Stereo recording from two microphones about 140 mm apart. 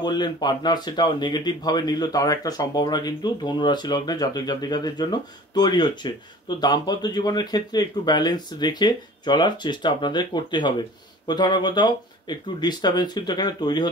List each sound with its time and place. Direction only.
0.0 s speech: 30° left (ahead or behind)